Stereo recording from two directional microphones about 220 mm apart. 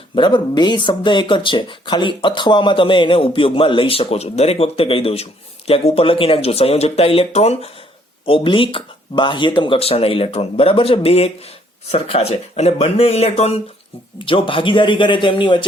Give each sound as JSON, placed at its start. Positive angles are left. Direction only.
{"t": 0.2, "sound": "speech", "side_deg": 20}